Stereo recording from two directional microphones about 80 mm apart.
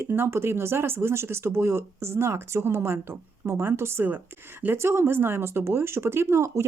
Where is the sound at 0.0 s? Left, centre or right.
Right.